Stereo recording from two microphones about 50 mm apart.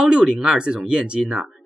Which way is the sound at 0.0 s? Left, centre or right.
Centre.